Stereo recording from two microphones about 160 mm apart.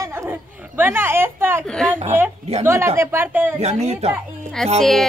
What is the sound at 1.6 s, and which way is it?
Speech, 5° left (ahead or behind).